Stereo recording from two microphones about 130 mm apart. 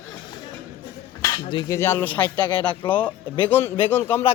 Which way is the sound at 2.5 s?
35° left (ahead or behind).